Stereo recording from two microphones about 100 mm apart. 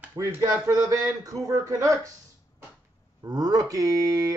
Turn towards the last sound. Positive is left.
turn(degrees=-35)  # may be behind; listen again after turning